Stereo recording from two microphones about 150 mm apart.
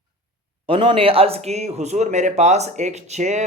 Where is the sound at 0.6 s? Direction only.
35° right (ahead or behind); by 3.4 s 50° right (ahead or behind).